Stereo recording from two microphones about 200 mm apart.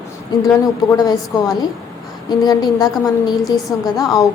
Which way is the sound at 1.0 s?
20° left (ahead or behind).